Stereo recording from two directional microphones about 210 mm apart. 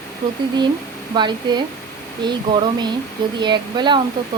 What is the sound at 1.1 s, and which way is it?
Speech, 20° right (ahead or behind).